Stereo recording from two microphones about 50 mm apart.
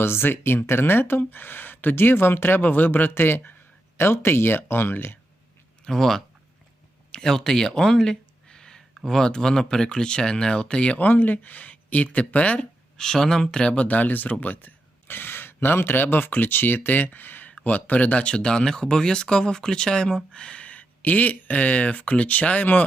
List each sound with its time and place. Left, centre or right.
0.0 s speech: left
5.8 s speech: centre
7.1 s a sound: centre
9.0 s speech: centre
11.0 s speech: left
13.0 s speech: centre
13.8 s speech: left